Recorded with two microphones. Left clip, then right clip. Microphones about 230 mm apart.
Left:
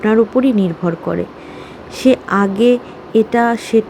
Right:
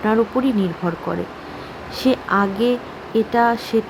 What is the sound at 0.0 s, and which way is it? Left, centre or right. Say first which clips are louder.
Speech: left 5 dB; centre.